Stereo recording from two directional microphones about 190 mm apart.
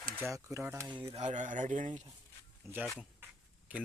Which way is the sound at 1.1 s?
40° right (ahead or behind).